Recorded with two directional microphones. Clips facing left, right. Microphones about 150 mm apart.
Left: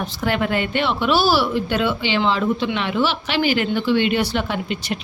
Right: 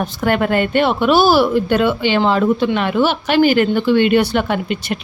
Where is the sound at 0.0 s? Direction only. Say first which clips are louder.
Right 5 dB; 50° right (ahead or behind).